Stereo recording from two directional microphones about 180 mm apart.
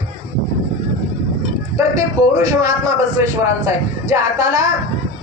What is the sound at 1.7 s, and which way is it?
A man's voice, 15° right (ahead or behind).